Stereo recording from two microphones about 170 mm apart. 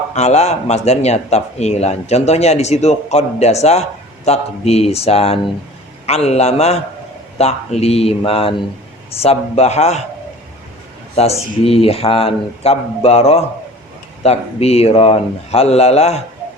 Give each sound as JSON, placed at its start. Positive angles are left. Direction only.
{"t": 0.1, "sound": "speech", "side_deg": 40}
{"t": 11.2, "sound": "speech", "side_deg": 35}